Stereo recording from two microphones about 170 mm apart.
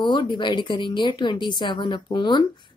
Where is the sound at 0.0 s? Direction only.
30° left (ahead or behind).